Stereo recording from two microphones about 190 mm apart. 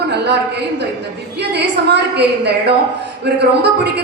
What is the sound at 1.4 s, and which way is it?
A woman's voice, 65° right (ahead or behind).